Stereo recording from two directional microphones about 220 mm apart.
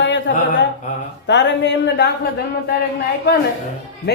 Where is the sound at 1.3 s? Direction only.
55° left (ahead or behind).